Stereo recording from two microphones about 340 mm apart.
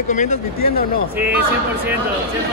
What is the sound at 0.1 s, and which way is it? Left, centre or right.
Speech, left.